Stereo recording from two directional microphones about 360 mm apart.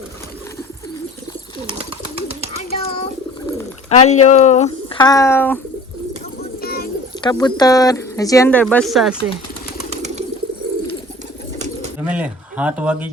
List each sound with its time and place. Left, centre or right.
2.6 s a sound: centre
3.8 s speech: centre
6.6 s bird: left
7.2 s speech: centre
9.9 s pigeon: centre
12.0 s speech: centre